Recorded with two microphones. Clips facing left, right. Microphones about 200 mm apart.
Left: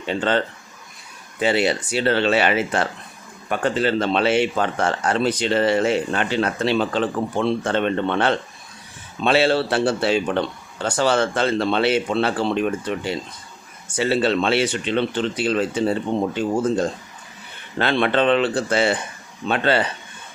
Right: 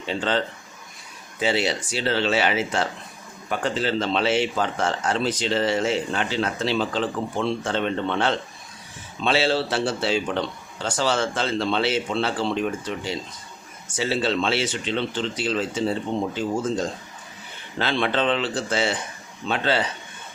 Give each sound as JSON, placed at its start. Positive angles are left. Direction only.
{"t": 0.0, "sound": "speech", "side_deg": 55}